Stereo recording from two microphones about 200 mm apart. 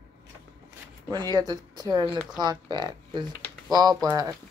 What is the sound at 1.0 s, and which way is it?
Speech, 20° right (ahead or behind).